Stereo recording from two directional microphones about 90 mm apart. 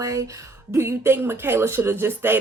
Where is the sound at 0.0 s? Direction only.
35° right (ahead or behind).